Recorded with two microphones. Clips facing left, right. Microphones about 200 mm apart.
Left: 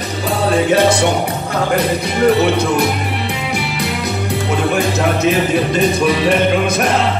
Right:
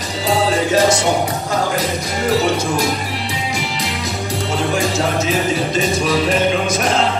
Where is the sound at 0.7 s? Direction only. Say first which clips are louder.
Left 3 dB; 60° left (ahead or behind).